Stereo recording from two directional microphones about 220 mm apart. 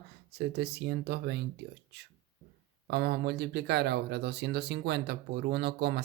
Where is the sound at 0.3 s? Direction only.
50° right (ahead or behind).